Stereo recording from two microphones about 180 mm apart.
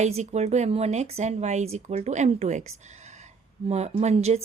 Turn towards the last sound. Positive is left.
turn(degrees=-35)  # may be behind; listen again after turning